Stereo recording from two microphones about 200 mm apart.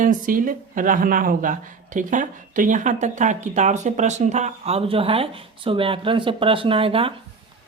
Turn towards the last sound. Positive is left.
turn(degrees=-25)  # may be behind; listen again after turning